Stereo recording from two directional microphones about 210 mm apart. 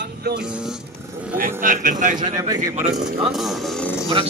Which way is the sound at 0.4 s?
5° right (ahead or behind).